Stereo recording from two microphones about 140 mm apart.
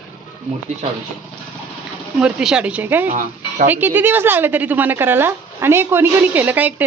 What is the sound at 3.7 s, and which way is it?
Speech, 15° right (ahead or behind).